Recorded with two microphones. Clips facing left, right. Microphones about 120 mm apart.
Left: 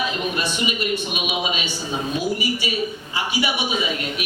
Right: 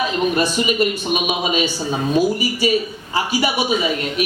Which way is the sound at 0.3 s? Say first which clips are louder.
Right 7 dB; 40° right (ahead or behind).